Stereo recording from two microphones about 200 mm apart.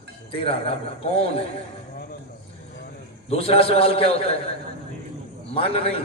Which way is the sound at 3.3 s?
30° left (ahead or behind).